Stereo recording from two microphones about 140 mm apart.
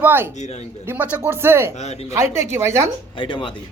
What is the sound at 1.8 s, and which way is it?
Speech, 50° left (ahead or behind).